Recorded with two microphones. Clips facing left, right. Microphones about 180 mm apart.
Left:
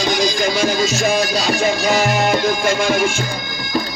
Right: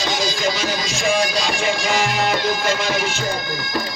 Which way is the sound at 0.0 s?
50° left (ahead or behind).